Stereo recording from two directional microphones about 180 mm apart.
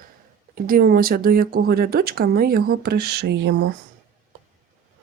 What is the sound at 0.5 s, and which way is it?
Speech, 55° right (ahead or behind).